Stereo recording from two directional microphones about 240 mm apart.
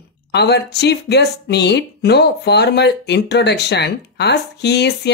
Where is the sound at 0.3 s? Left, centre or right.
Left.